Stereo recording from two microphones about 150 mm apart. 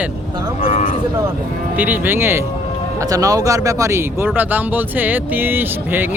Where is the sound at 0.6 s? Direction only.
55° left (ahead or behind).